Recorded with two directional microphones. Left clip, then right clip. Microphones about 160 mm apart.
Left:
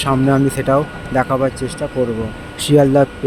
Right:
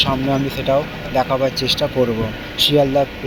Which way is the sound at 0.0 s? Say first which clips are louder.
Left 3 dB; 50° left (ahead or behind).